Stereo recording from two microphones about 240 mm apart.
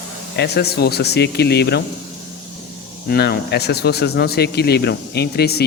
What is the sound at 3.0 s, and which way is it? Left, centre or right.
Speech, left.